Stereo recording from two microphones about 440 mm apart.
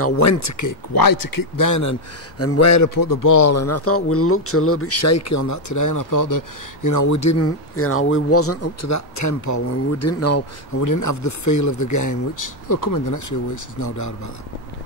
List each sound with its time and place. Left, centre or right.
0.0 s speech: left